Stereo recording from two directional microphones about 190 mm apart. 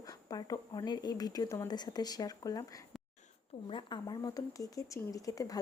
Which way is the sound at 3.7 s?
25° left (ahead or behind).